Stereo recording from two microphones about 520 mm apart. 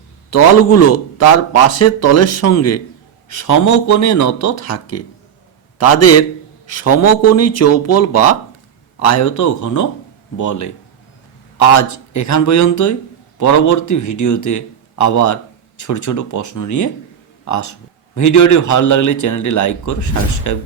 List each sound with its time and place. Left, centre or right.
0.3 s a man's voice: left